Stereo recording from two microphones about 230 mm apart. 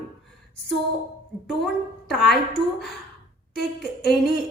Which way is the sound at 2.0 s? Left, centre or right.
Centre.